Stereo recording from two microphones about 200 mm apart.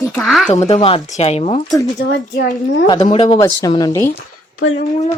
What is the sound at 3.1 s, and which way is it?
Speech, 25° left (ahead or behind).